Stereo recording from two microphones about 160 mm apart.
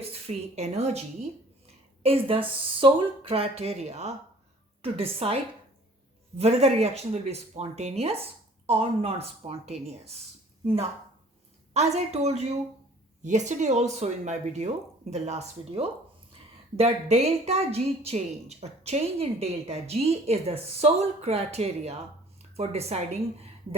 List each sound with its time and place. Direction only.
0.0 s a woman's voice: 40° right (ahead or behind)
11.7 s a woman's voice: 45° right (ahead or behind)